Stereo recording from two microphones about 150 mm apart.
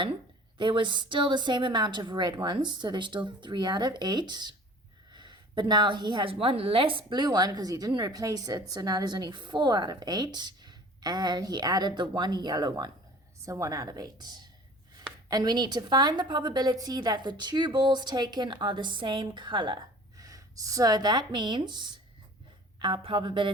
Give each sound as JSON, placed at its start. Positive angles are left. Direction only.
{"t": 0.6, "sound": "a woman's voice", "side_deg": -35}